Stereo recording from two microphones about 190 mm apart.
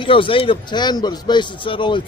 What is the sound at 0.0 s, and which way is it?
Speech, 25° left (ahead or behind).